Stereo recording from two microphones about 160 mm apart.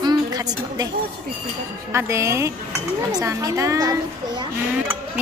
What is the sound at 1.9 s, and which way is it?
A woman's voice, 15° right (ahead or behind).